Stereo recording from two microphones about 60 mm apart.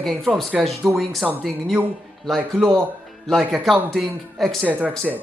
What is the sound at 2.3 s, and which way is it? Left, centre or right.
Speech, centre.